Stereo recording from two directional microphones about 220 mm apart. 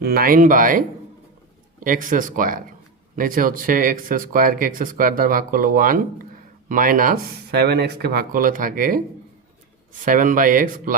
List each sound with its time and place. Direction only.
0.0 s speech: 45° right (ahead or behind)
10.1 s speech: 40° right (ahead or behind)